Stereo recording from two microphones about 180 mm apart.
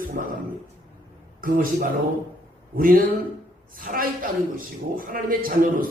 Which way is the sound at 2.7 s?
55° right (ahead or behind).